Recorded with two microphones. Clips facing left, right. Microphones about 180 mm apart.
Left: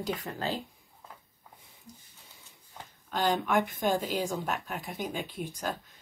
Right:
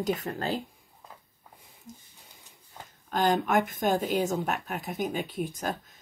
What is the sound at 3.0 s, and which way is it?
A woman's voice, 50° right (ahead or behind).